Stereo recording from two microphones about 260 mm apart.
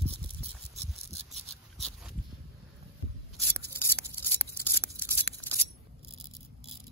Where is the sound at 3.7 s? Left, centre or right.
Centre.